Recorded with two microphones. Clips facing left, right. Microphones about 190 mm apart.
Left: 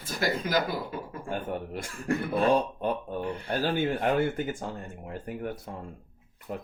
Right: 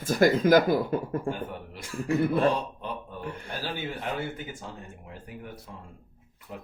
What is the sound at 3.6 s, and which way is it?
Speech, 50° left (ahead or behind).